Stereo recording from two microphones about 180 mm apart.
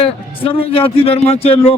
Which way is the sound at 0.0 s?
30° left (ahead or behind).